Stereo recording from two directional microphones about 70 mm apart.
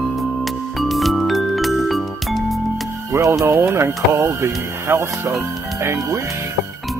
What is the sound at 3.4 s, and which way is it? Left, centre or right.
Speech, right.